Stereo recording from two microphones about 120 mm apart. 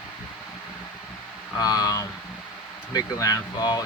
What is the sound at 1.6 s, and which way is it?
Speech, 30° left (ahead or behind).